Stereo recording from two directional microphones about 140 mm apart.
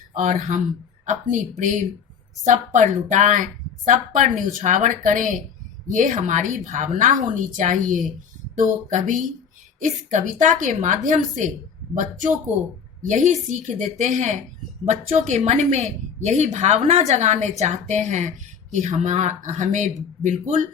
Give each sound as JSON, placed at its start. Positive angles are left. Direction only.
{"t": 0.1, "sound": "a woman's voice", "side_deg": -65}
{"t": 12.5, "sound": "speech", "side_deg": -10}
{"t": 13.1, "sound": "a woman's voice", "side_deg": -65}